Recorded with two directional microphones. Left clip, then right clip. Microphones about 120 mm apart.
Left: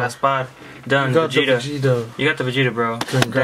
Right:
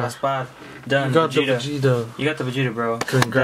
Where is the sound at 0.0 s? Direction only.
35° left (ahead or behind).